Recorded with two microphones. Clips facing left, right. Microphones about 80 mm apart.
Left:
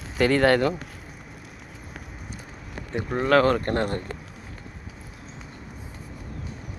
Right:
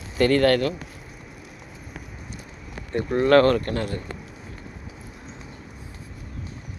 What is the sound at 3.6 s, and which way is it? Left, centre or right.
Speech, left.